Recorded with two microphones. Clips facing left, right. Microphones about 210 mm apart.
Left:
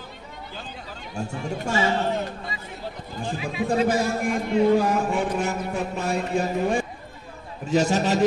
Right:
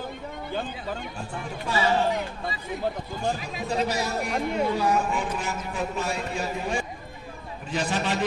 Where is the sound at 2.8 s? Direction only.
50° right (ahead or behind).